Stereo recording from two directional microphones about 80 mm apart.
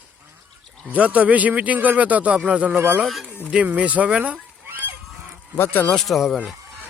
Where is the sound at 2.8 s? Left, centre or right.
Right.